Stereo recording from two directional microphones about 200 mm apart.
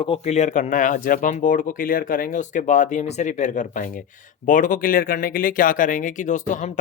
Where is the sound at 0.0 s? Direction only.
30° left (ahead or behind).